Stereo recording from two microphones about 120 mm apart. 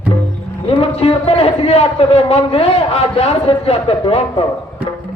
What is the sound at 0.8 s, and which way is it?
A man's voice, 55° left (ahead or behind).